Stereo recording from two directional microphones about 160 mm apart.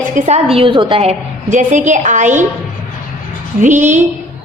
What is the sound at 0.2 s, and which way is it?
Speech, 45° right (ahead or behind).